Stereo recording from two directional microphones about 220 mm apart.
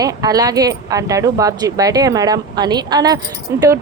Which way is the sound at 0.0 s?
15° right (ahead or behind).